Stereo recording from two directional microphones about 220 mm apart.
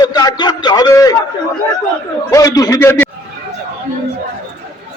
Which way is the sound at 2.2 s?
15° left (ahead or behind).